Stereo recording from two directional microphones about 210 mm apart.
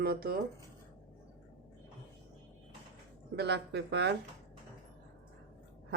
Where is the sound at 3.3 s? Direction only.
55° right (ahead or behind).